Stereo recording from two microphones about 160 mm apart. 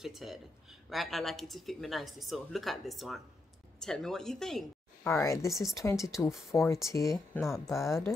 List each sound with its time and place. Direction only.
0.0 s speech: centre (ahead or behind)
5.0 s speech: 15° left (ahead or behind)
7.5 s speech: centre (ahead or behind)